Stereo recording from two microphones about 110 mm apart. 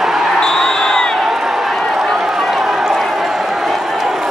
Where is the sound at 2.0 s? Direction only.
5° right (ahead or behind).